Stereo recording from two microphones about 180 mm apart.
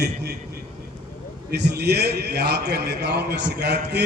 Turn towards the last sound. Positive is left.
turn(degrees=-65)  # may be behind; listen again after turning